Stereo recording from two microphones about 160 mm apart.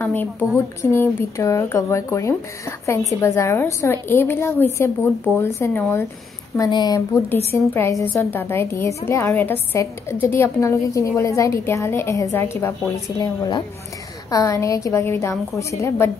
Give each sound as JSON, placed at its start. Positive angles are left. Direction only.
{"t": 0.0, "sound": "a woman's voice", "side_deg": 10}